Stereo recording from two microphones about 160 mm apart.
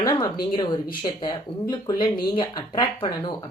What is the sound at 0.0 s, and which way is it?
A woman's voice, 25° left (ahead or behind).